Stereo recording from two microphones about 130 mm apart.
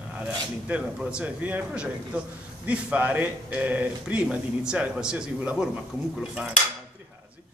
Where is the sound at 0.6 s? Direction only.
10° right (ahead or behind).